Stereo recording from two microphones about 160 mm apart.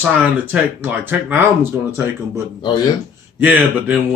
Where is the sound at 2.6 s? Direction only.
30° left (ahead or behind).